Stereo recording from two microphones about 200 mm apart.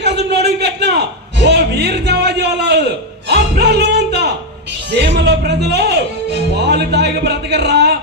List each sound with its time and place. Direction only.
0.0 s a sound: 55° right (ahead or behind)
1.4 s music: 55° right (ahead or behind)
4.9 s speech: 55° right (ahead or behind)